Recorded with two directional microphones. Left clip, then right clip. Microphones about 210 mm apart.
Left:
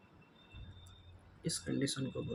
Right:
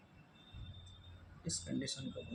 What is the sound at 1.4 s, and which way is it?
Speech, 45° left (ahead or behind).